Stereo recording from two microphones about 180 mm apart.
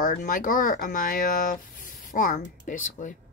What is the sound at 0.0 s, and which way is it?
Speech, 50° left (ahead or behind).